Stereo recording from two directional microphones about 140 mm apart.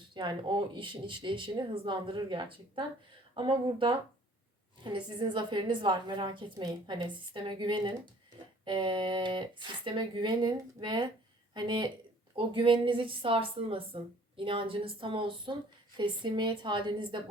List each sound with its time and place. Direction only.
0.1 s a woman's voice: 35° right (ahead or behind)